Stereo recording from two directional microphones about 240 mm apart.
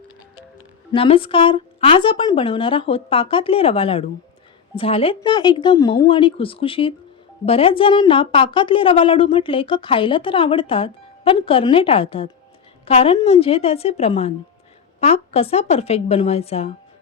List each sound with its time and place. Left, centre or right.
0.9 s a woman's voice: left